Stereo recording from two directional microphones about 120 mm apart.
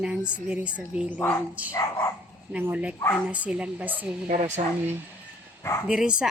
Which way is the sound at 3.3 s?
10° right (ahead or behind).